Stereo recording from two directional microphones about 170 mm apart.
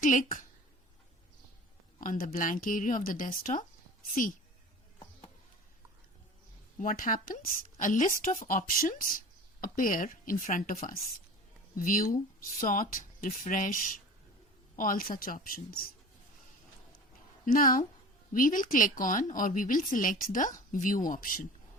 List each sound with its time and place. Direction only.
0.0 s a woman's voice: 50° left (ahead or behind)
2.0 s a woman's voice: 50° left (ahead or behind)
6.7 s a woman's voice: 55° left (ahead or behind)
17.4 s a woman's voice: 55° left (ahead or behind)